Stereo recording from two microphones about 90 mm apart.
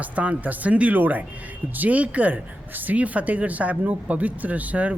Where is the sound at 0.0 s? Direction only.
15° right (ahead or behind).